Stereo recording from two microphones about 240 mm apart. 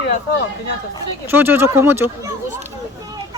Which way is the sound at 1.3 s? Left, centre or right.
Centre.